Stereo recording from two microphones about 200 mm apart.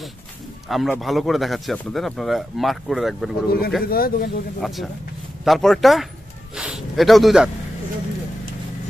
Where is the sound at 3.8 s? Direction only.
50° left (ahead or behind).